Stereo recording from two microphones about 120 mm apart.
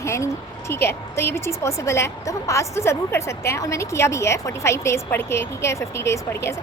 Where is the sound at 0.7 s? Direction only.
20° left (ahead or behind).